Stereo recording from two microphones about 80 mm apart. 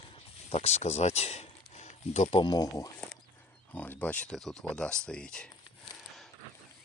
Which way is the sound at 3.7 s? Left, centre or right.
Left.